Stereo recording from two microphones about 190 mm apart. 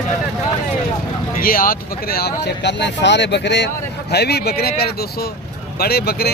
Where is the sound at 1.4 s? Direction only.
50° left (ahead or behind).